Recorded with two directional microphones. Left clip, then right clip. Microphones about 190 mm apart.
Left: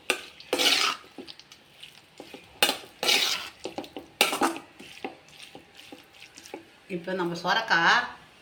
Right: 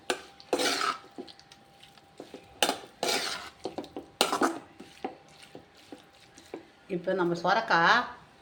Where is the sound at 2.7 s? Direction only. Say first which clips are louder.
Left 5 dB; 10° right (ahead or behind).